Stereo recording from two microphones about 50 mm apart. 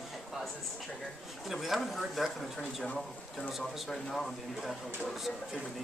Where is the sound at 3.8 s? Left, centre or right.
Centre.